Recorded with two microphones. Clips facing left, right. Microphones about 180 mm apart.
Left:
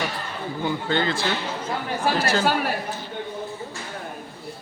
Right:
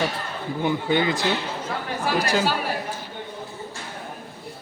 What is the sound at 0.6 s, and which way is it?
Speech, 15° right (ahead or behind).